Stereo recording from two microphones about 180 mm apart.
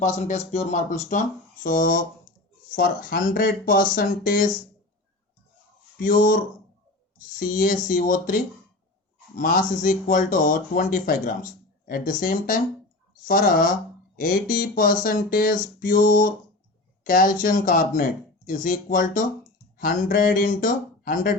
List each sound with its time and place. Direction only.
0.0 s speech: 40° left (ahead or behind)
6.0 s speech: 50° left (ahead or behind)